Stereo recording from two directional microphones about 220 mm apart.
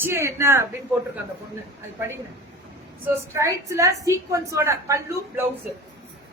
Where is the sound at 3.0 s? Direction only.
15° right (ahead or behind).